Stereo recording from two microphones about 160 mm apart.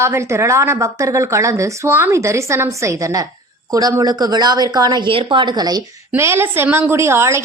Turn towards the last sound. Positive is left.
turn(degrees=-15)  # may be behind; listen again after turning